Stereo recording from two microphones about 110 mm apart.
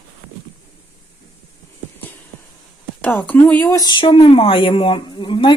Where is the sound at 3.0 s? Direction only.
15° left (ahead or behind).